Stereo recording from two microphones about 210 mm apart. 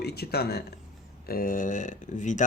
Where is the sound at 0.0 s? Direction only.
50° left (ahead or behind).